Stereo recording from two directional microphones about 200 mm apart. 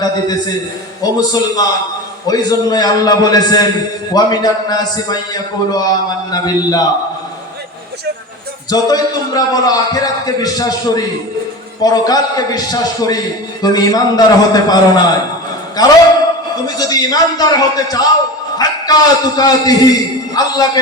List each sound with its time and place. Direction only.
1.0 s a man's voice: 20° left (ahead or behind)
8.7 s a man's voice: 20° left (ahead or behind)